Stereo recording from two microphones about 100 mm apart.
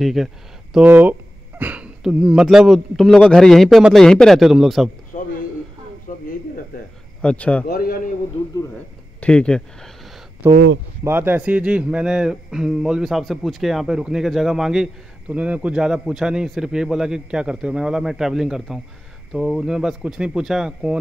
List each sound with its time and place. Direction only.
0.0 s speech: centre (ahead or behind)
0.8 s speech: 20° right (ahead or behind)
1.6 s a sound: 15° right (ahead or behind)
2.0 s a man's voice: 10° right (ahead or behind)
7.2 s speech: 10° left (ahead or behind)
9.2 s speech: 10° left (ahead or behind)
10.4 s speech: 25° right (ahead or behind); by 21.0 s 5° right (ahead or behind)